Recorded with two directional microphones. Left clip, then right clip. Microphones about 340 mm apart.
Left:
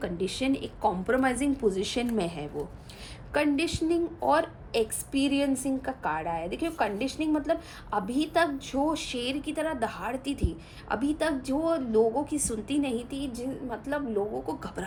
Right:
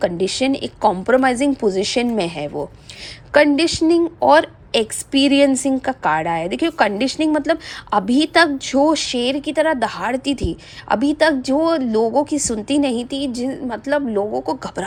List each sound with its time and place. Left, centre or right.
0.0 s a woman's voice: centre